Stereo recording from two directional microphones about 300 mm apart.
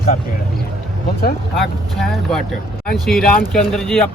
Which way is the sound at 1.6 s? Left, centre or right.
Centre.